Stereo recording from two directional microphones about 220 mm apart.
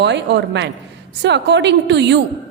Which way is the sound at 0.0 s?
50° right (ahead or behind).